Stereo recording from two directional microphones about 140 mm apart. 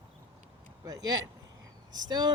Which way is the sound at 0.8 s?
25° right (ahead or behind).